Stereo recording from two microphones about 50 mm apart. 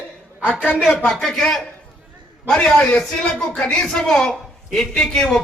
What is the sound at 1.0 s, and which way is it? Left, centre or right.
A man's voice, centre.